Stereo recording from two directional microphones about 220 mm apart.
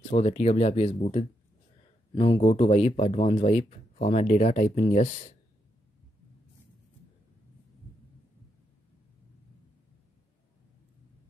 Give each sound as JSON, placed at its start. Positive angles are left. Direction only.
{"t": 0.1, "sound": "speech", "side_deg": 30}
{"t": 2.1, "sound": "speech", "side_deg": 20}